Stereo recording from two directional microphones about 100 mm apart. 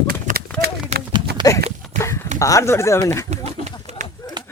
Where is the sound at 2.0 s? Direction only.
30° left (ahead or behind).